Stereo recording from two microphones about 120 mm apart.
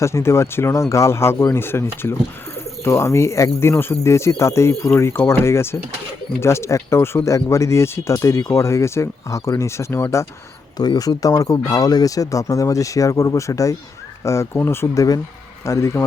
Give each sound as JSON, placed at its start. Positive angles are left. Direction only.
{"t": 0.0, "sound": "speech", "side_deg": 25}